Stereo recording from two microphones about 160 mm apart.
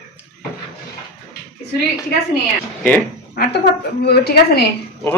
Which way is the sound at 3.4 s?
80° left.